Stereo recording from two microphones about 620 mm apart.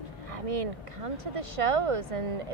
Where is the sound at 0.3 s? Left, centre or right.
Right.